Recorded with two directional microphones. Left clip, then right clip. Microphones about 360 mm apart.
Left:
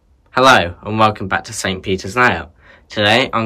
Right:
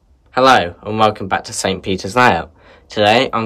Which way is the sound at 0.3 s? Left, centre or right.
Centre.